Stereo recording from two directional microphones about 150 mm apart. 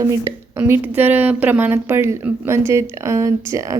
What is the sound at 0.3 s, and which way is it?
A woman's voice, 15° right (ahead or behind).